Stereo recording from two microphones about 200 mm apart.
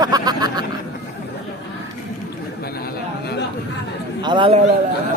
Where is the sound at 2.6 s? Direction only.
50° left (ahead or behind).